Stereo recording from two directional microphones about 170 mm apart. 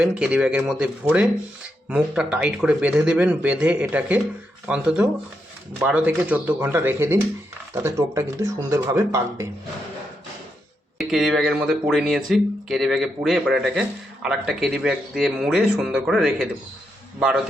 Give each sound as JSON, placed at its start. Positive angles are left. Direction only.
{"t": 0.0, "sound": "speech", "side_deg": -5}
{"t": 11.1, "sound": "speech", "side_deg": 0}